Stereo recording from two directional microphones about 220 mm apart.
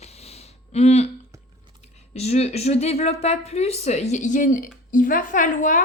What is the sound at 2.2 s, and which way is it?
A woman's voice, 30° left (ahead or behind).